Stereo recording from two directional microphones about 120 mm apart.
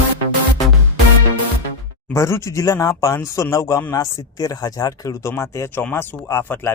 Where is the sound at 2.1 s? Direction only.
25° left (ahead or behind).